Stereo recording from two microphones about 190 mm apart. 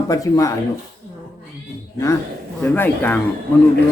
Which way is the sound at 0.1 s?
15° left (ahead or behind).